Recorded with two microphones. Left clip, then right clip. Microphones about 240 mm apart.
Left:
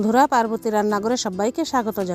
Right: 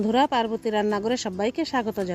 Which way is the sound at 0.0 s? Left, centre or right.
Centre.